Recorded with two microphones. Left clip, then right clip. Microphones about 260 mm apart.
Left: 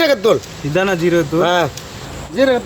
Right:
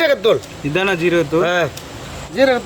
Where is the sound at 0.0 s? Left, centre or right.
Left.